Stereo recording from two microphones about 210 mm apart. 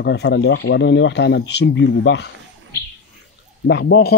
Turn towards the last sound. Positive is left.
turn(degrees=50)  # may be behind; listen again after turning